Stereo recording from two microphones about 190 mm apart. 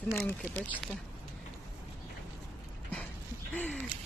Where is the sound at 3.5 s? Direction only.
10° left (ahead or behind).